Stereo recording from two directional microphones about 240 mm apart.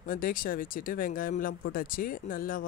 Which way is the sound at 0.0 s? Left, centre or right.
Left.